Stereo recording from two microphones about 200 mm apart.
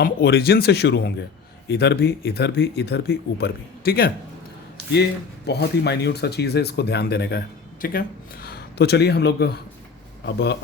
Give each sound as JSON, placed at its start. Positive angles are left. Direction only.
{"t": 0.0, "sound": "speech", "side_deg": 50}
{"t": 5.5, "sound": "speech", "side_deg": 55}